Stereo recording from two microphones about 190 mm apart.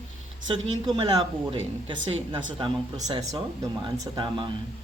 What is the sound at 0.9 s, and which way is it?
Speech, 25° right (ahead or behind).